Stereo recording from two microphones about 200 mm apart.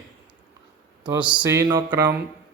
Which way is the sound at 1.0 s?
25° right (ahead or behind).